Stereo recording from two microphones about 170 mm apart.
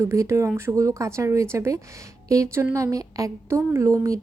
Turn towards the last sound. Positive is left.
turn(degrees=-20)  # may be behind; listen again after turning